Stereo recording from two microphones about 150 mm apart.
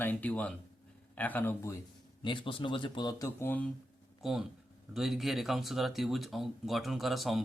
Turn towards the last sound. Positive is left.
turn(degrees=0)  # may be behind; listen again after turning